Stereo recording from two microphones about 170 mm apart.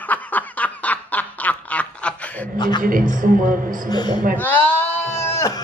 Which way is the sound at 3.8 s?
25° left (ahead or behind).